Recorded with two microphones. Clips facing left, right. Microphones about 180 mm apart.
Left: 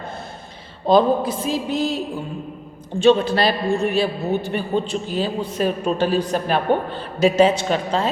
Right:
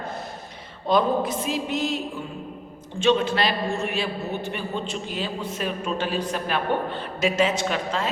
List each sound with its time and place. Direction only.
0.9 s a man's voice: 30° left (ahead or behind)
3.0 s a man's voice: 35° left (ahead or behind)